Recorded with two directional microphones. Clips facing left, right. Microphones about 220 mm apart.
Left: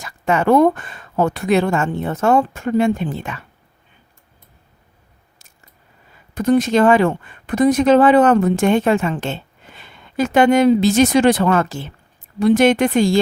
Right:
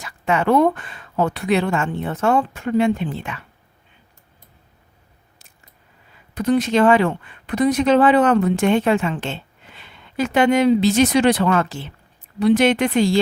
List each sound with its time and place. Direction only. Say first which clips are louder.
0.0 s speech: left 2 dB; 45° left (ahead or behind)
6.3 s speech: left 3 dB; 45° left (ahead or behind)